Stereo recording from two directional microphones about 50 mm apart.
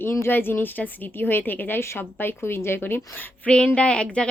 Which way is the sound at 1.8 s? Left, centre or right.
Left.